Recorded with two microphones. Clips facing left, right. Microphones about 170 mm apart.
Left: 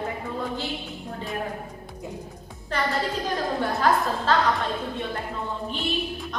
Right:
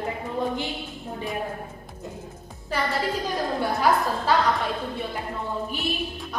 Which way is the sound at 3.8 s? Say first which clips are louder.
Even; 10° right (ahead or behind).